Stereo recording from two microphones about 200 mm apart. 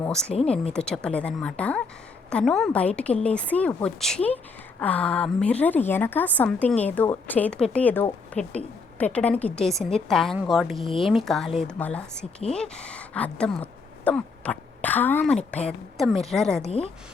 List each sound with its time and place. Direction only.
0.0 s a woman's voice: 5° left (ahead or behind)
16.6 s speech: 30° left (ahead or behind)